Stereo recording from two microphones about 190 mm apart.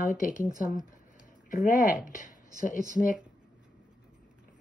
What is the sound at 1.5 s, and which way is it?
Speech, 45° left (ahead or behind).